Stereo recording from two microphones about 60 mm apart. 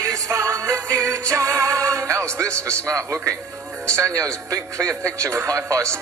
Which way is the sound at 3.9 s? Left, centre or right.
Right.